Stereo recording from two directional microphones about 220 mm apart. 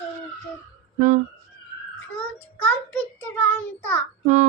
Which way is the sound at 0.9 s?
35° right (ahead or behind).